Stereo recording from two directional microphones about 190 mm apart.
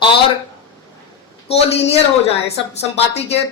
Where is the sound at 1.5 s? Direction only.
30° left (ahead or behind).